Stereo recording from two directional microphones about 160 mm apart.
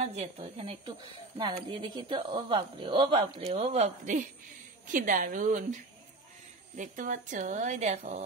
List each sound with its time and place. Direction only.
0.0 s a woman's voice: 40° right (ahead or behind)
6.8 s speech: 55° right (ahead or behind)